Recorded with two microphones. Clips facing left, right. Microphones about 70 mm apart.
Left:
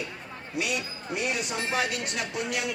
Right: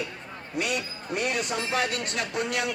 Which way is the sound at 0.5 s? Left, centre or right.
Right.